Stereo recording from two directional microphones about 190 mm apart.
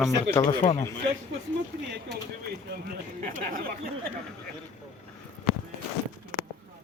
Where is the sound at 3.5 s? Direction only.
50° right (ahead or behind).